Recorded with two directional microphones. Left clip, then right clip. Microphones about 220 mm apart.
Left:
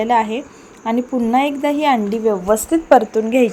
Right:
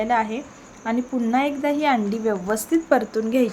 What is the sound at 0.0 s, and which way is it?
A woman's voice, 15° left (ahead or behind).